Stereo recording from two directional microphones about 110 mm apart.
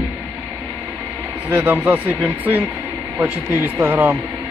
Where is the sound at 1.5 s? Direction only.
15° right (ahead or behind).